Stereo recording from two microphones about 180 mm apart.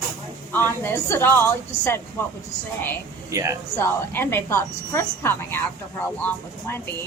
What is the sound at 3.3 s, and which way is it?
Speech, 15° right (ahead or behind).